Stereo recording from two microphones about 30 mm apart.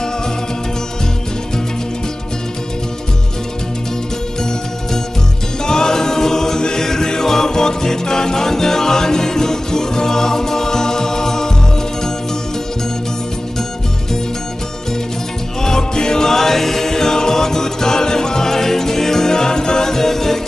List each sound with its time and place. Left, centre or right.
5.7 s choir: left
6.8 s music: centre
15.6 s music: left